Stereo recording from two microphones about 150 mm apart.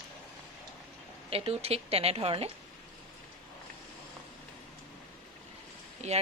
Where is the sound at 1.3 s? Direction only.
40° right (ahead or behind).